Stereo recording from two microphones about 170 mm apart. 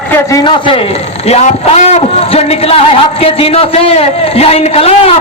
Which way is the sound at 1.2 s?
40° left (ahead or behind).